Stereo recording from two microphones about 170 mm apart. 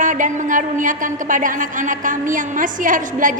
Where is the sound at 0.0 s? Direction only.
50° right (ahead or behind).